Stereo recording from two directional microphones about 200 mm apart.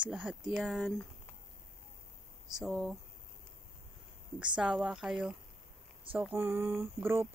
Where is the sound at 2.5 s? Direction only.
Centre (ahead or behind).